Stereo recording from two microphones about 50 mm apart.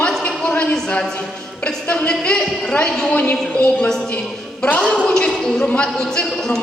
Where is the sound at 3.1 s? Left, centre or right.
Left.